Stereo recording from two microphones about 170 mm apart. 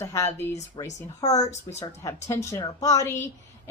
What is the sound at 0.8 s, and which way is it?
A woman's voice, 25° left (ahead or behind).